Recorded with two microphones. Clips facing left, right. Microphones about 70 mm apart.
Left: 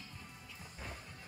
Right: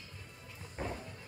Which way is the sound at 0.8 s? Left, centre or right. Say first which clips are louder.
Right 9 dB; right.